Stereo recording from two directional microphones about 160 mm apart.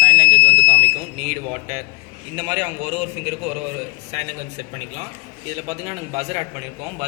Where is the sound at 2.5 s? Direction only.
35° right (ahead or behind).